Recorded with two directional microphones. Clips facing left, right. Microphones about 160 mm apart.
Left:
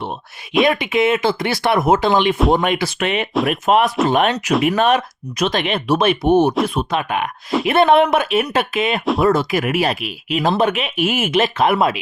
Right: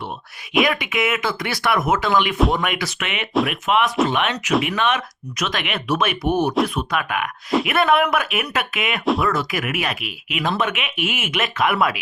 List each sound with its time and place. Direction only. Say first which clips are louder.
0.6 s speech: left 6 dB; 30° left (ahead or behind)